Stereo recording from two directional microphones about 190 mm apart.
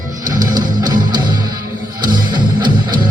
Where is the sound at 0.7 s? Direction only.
20° right (ahead or behind).